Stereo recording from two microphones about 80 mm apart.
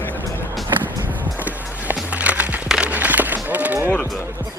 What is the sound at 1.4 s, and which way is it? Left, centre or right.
Music, right.